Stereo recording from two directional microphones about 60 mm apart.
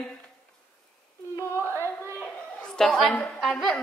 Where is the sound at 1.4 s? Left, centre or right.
Left.